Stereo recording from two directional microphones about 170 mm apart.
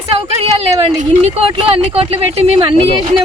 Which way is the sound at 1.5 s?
30° right (ahead or behind).